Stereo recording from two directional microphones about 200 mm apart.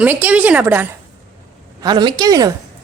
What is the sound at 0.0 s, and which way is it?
Speech, 10° right (ahead or behind).